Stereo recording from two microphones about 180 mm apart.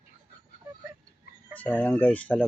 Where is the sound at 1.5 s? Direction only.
10° left (ahead or behind).